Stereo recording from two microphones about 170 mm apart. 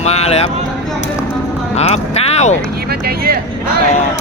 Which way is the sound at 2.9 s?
65° right (ahead or behind).